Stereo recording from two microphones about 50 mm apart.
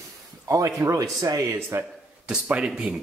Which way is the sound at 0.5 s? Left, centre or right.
Right.